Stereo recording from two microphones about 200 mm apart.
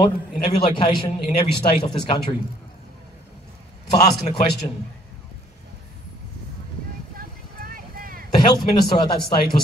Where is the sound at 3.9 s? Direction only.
30° left (ahead or behind).